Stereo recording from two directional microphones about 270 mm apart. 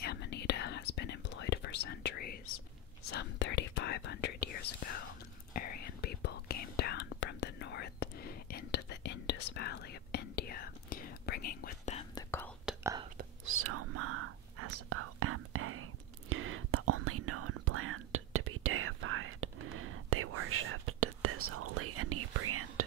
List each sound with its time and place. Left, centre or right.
0.0 s whispering: left
12.6 s whispering: centre
13.6 s whispering: right